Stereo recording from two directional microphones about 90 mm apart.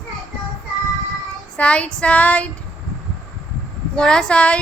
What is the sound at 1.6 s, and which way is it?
Speech, 10° left (ahead or behind).